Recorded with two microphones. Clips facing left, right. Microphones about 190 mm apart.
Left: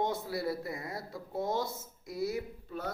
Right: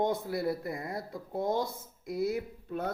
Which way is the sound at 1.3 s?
55° right (ahead or behind).